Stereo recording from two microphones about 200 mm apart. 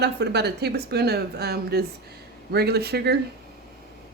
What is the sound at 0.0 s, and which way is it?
A woman's voice, 55° right (ahead or behind).